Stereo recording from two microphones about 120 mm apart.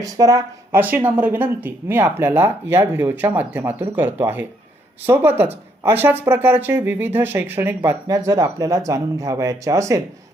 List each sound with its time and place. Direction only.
0.0 s speech: 30° right (ahead or behind)
0.8 s speech: 15° right (ahead or behind)
8.0 s speech: 30° right (ahead or behind)